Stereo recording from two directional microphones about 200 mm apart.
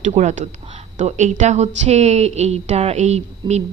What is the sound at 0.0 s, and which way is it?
A woman's voice, 35° right (ahead or behind).